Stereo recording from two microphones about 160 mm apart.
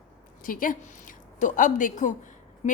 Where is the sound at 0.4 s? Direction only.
60° left (ahead or behind).